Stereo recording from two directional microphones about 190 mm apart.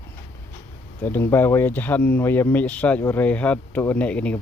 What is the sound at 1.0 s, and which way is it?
Speech, 10° left (ahead or behind).